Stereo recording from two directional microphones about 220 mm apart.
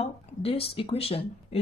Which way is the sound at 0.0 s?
30° left (ahead or behind).